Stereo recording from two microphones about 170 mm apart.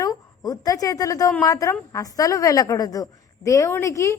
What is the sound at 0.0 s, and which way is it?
A woman's voice, 20° left (ahead or behind).